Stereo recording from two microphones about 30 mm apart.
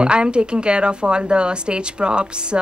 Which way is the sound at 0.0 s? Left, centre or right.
Right.